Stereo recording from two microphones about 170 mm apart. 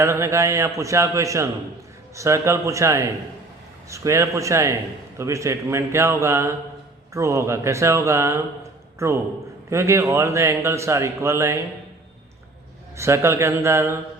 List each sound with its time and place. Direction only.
0.0 s a man's voice: 15° right (ahead or behind)
13.0 s a man's voice: 15° right (ahead or behind)